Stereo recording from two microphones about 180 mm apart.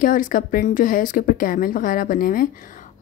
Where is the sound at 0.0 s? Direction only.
50° left (ahead or behind).